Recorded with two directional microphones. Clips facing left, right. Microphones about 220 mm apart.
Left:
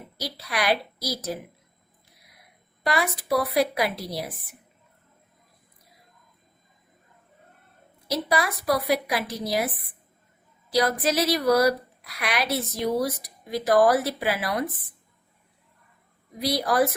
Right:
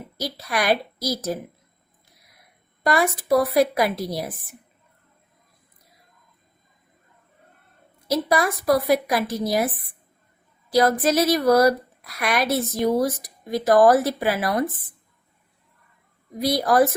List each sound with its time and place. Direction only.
0.2 s a woman's voice: 45° right (ahead or behind)
2.8 s a woman's voice: 45° right (ahead or behind)
8.1 s a woman's voice: 45° right (ahead or behind)
10.7 s a woman's voice: 50° right (ahead or behind)
16.4 s a woman's voice: 50° right (ahead or behind)